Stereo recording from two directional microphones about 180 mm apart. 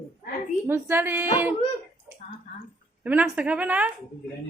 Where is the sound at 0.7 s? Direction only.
15° right (ahead or behind).